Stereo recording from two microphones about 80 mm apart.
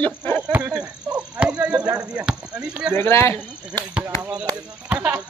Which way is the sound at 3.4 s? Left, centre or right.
Centre.